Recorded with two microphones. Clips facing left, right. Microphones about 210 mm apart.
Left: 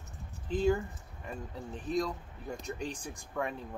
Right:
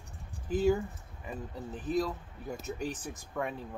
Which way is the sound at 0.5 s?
5° right (ahead or behind).